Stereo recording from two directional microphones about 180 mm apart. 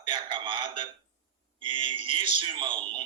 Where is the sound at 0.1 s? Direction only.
25° right (ahead or behind).